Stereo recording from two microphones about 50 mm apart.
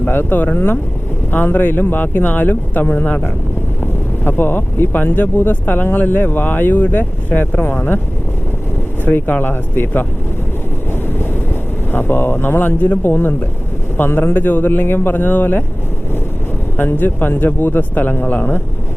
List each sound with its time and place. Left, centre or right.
0.0 s speech: left
9.0 s speech: left
11.9 s speech: left
14.3 s speech: left
16.7 s speech: left